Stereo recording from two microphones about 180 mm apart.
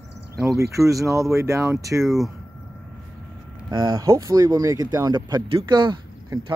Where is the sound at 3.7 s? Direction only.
25° right (ahead or behind).